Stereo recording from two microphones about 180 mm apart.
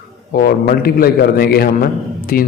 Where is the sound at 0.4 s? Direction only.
55° left (ahead or behind).